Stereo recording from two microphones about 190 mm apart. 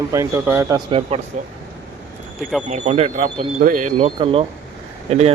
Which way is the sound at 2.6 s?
40° right (ahead or behind).